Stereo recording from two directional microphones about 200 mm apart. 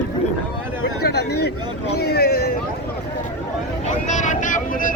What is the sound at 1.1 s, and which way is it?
Speech, 55° left (ahead or behind).